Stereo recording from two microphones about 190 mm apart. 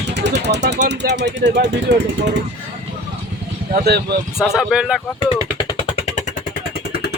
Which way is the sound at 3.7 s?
55° right (ahead or behind).